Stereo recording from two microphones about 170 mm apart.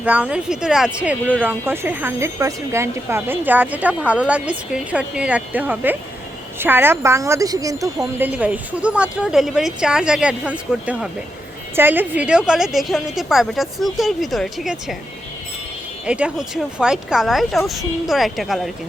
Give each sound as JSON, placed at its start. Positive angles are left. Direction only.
{"t": 0.0, "sound": "a woman's voice", "side_deg": -10}
{"t": 8.3, "sound": "a woman's voice", "side_deg": -10}
{"t": 16.0, "sound": "a woman's voice", "side_deg": -5}